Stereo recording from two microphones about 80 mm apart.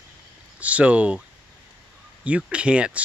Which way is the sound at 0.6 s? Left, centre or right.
Centre.